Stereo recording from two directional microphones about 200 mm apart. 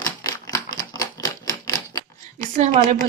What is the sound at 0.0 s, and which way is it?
Typewriter, 15° left (ahead or behind).